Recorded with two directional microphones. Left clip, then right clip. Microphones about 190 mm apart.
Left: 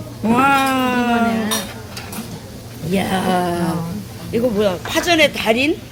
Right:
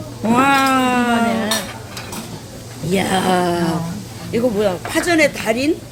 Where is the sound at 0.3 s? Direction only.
5° right (ahead or behind).